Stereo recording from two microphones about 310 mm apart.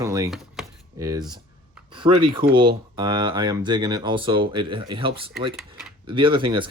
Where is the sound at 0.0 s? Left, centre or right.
Centre.